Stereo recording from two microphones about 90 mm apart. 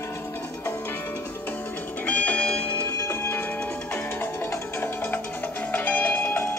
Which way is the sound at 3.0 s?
25° left (ahead or behind).